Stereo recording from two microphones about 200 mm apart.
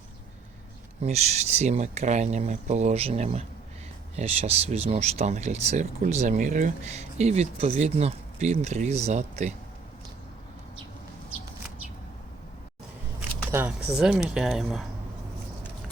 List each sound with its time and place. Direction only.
1.0 s speech: 35° right (ahead or behind)
13.5 s speech: 10° right (ahead or behind)